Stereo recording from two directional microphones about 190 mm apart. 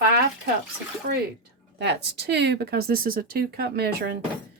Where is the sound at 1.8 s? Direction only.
65° right (ahead or behind).